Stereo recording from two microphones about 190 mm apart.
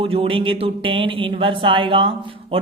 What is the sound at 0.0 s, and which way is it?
Speech, 30° right (ahead or behind).